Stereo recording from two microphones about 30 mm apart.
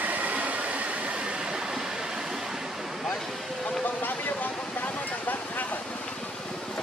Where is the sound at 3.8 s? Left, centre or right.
Left.